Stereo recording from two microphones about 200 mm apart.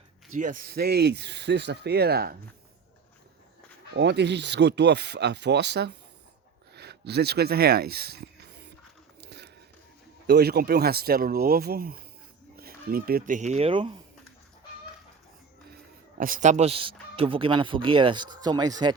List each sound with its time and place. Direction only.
0.3 s speech: 40° right (ahead or behind)
3.9 s speech: 60° right (ahead or behind)
9.2 s a sound: 55° right (ahead or behind)
10.2 s speech: 55° right (ahead or behind); by 13.9 s 30° right (ahead or behind)
16.1 s speech: 45° right (ahead or behind); by 18.9 s 20° right (ahead or behind)